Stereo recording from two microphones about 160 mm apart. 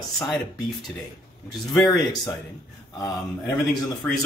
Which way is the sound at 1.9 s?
25° left (ahead or behind).